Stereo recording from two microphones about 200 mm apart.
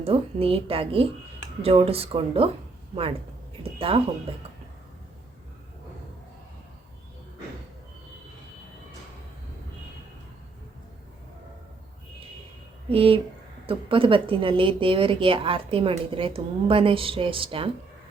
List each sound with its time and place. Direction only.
0.0 s a woman's voice: 30° right (ahead or behind)
12.9 s a woman's voice: 25° right (ahead or behind)